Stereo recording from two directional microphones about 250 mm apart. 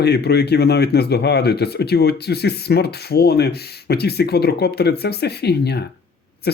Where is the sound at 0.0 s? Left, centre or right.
Left.